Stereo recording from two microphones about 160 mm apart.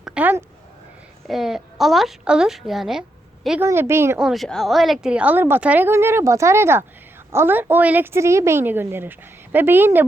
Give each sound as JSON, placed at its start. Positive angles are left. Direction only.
{"t": 0.0, "sound": "a woman's voice", "side_deg": -5}
{"t": 3.6, "sound": "a woman's voice", "side_deg": -15}
{"t": 4.2, "sound": "a woman's voice", "side_deg": 0}